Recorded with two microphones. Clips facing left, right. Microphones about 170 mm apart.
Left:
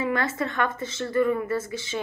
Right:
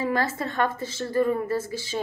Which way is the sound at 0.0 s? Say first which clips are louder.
Even; 35° right (ahead or behind).